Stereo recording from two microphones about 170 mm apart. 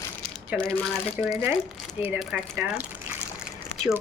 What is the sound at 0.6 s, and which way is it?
Speech, 5° left (ahead or behind).